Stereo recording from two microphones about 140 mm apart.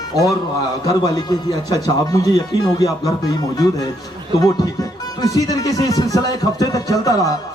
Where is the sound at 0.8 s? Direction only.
25° left (ahead or behind).